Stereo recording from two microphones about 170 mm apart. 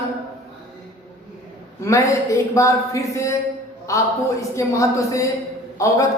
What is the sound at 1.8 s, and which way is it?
A man's voice, 15° left (ahead or behind).